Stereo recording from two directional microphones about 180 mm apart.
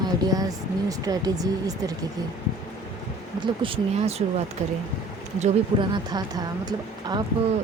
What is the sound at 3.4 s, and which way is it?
Speech, 30° right (ahead or behind).